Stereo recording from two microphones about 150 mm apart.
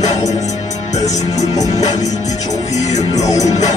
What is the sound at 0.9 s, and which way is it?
Music, 50° left (ahead or behind).